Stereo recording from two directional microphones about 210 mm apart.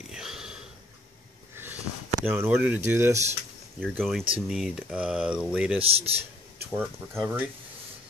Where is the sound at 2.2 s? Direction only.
10° right (ahead or behind).